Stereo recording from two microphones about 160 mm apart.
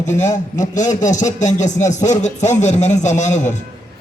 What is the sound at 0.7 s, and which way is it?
Speech, 50° left (ahead or behind).